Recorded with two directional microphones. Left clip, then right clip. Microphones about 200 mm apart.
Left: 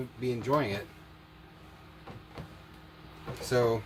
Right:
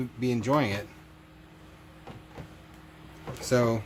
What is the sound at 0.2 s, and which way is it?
Speech, 40° right (ahead or behind).